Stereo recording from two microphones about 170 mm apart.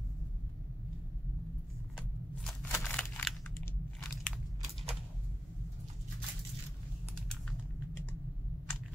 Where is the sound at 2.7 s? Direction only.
10° left (ahead or behind).